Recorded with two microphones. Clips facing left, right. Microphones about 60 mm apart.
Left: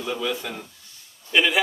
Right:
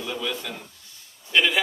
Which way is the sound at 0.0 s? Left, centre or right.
Centre.